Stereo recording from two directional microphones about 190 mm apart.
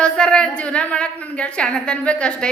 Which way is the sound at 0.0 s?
5° left (ahead or behind).